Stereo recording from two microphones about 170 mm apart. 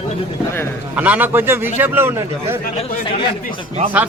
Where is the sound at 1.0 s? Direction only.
10° right (ahead or behind).